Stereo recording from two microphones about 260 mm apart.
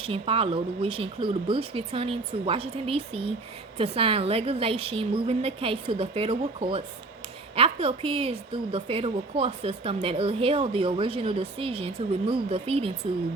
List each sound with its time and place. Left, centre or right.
0.0 s a woman's voice: right